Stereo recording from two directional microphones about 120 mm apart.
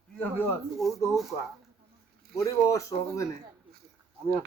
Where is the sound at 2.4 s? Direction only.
25° left (ahead or behind).